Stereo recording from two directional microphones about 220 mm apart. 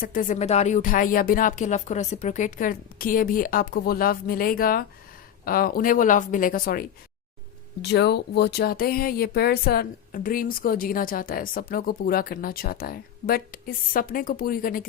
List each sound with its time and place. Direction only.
0.0 s speech: 40° left (ahead or behind)